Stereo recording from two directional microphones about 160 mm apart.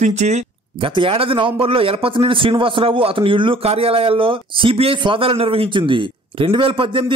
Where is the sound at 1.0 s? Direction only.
35° right (ahead or behind).